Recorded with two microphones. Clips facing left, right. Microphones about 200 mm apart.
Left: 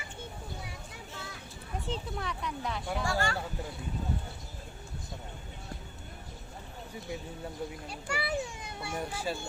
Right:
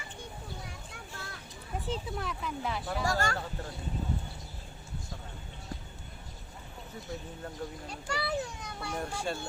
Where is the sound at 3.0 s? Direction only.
40° right (ahead or behind).